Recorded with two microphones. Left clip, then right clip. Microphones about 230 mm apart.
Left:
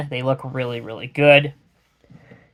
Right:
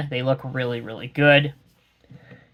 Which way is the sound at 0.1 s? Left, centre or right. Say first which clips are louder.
Left 1 dB; left.